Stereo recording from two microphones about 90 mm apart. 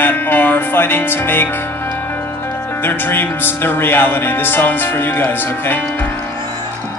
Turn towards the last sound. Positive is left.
turn(degrees=20)  # may be behind; listen again after turning